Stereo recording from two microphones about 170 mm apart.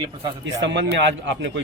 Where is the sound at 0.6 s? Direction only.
90° right.